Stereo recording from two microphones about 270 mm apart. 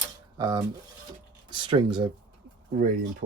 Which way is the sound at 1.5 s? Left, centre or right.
Centre.